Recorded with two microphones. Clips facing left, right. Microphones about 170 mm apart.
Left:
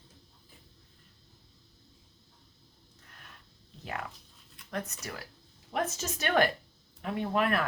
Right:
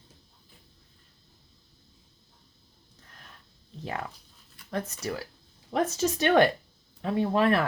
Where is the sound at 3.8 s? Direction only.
30° right (ahead or behind).